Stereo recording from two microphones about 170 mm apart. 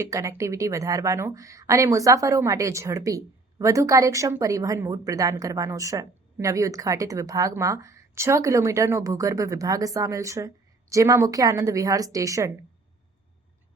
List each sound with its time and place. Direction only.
0.0 s a woman's voice: 20° right (ahead or behind)